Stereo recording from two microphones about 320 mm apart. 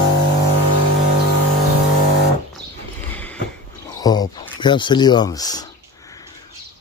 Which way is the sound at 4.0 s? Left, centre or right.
Centre.